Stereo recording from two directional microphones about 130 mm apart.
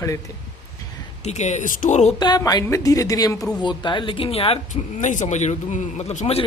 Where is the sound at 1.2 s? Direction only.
65° left (ahead or behind).